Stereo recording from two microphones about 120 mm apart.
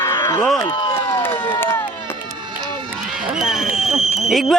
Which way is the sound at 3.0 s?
5° right (ahead or behind).